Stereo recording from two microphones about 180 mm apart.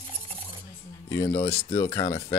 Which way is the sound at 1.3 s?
30° left (ahead or behind).